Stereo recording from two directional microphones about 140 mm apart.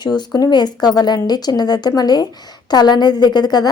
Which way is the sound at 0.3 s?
30° left (ahead or behind).